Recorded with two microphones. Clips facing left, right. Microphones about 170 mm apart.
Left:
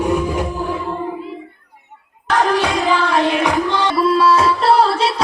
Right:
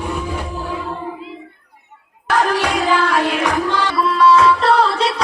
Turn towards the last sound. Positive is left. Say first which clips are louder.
# right 1 dB
turn(degrees=30)  # may be behind; listen again after turning